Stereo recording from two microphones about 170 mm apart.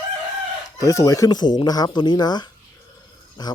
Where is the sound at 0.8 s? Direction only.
20° left (ahead or behind).